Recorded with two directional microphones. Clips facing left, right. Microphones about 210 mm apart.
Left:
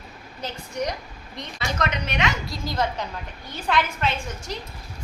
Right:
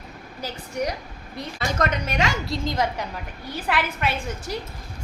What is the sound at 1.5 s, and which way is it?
Speech, 45° right (ahead or behind).